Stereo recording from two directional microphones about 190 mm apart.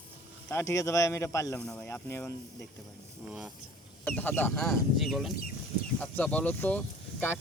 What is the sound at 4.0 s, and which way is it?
Speech, 10° left (ahead or behind).